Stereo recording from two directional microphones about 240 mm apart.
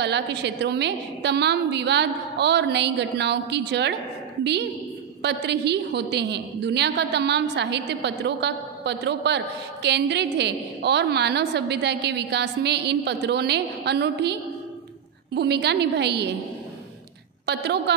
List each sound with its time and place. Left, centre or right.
0.0 s a woman's voice: right
5.2 s a woman's voice: right
15.3 s a woman's voice: right
17.5 s a woman's voice: right